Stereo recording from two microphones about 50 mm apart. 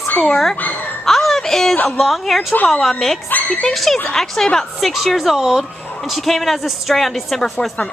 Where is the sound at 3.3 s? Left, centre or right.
Left.